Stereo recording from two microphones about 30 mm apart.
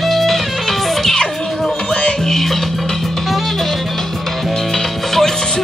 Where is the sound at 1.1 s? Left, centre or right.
Left.